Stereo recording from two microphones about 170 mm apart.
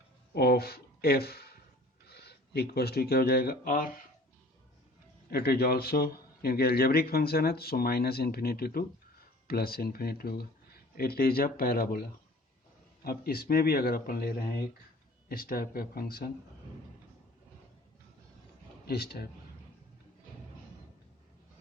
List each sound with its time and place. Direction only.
0.3 s speech: 65° left (ahead or behind)
5.3 s a man's voice: 70° left (ahead or behind)
13.1 s a man's voice: 65° left (ahead or behind)
18.9 s a man's voice: 65° left (ahead or behind)